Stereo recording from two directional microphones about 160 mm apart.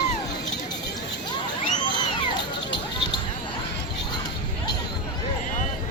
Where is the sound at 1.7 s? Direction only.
30° left (ahead or behind).